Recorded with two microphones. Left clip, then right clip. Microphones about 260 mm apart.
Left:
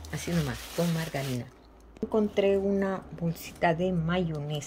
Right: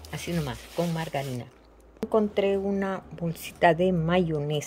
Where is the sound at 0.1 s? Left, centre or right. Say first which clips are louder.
Right 1 dB; centre.